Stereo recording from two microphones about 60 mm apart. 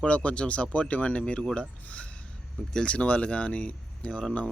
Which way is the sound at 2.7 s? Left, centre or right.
Centre.